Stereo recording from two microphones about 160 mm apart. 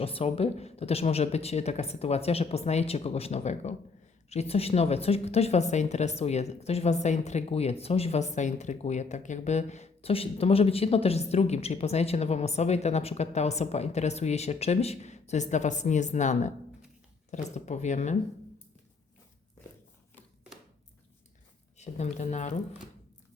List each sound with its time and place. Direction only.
0.0 s speech: 35° left (ahead or behind)
21.8 s speech: 45° left (ahead or behind)